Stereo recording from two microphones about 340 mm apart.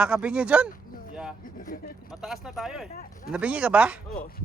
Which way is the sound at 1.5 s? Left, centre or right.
Left.